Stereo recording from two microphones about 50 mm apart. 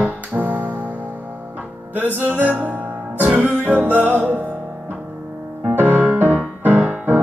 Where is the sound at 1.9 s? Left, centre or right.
Right.